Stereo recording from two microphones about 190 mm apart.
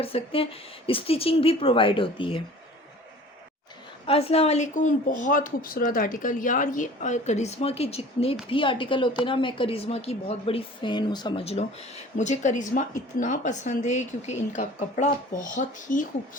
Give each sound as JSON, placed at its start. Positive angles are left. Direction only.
{"t": 0.0, "sound": "speech", "side_deg": 30}
{"t": 4.0, "sound": "a woman's voice", "side_deg": 30}